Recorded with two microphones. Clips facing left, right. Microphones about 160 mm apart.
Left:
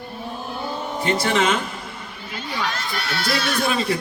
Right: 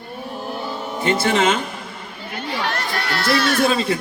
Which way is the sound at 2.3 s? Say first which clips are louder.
Right 3 dB; 65° right (ahead or behind).